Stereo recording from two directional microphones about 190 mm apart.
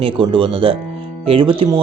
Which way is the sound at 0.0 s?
25° right (ahead or behind).